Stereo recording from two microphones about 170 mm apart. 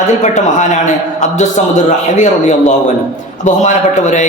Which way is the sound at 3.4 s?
45° left (ahead or behind).